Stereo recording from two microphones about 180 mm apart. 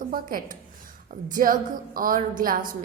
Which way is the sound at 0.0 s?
50° right (ahead or behind).